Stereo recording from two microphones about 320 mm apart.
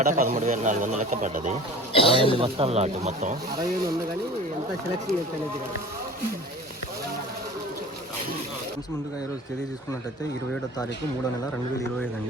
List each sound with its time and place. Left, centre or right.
0.0 s speech: right
1.9 s a man's voice: centre
2.4 s speech: centre